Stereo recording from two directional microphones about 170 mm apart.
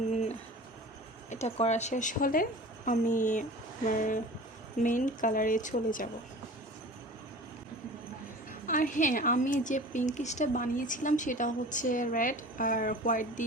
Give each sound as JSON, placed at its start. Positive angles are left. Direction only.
{"t": 1.3, "sound": "a woman's voice", "side_deg": 40}
{"t": 8.6, "sound": "a woman's voice", "side_deg": 50}